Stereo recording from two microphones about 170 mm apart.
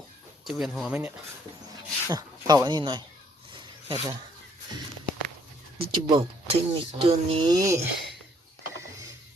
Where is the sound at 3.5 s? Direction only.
30° right (ahead or behind).